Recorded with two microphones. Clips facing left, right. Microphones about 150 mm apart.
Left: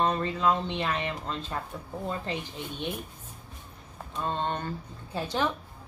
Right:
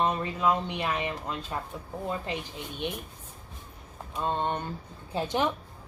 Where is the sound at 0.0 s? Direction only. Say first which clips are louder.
Left 1 dB; 10° right (ahead or behind).